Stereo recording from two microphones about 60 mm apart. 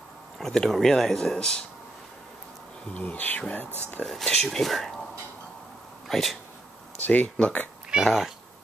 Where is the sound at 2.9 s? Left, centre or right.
Left.